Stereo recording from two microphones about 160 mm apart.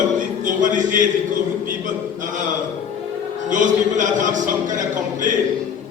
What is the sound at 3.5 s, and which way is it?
A man's voice, 50° right (ahead or behind).